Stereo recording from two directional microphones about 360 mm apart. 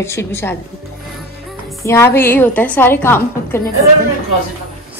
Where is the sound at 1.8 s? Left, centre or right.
Centre.